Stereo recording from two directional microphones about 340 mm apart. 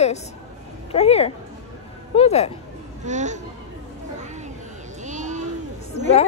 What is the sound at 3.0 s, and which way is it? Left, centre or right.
Speech, right.